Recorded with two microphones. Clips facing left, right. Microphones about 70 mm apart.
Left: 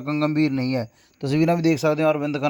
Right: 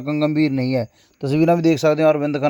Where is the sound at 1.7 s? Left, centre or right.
Right.